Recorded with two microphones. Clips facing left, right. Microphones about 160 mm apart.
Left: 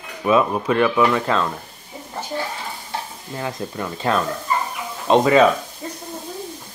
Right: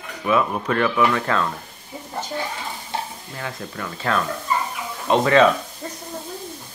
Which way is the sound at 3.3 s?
25° left (ahead or behind).